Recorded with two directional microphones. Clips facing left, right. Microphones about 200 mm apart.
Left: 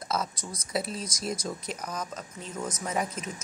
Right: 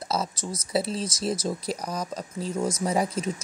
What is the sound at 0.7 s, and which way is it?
Speech, 30° right (ahead or behind).